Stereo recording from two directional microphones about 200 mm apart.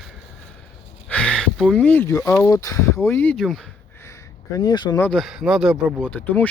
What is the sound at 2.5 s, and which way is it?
Speech, 15° left (ahead or behind).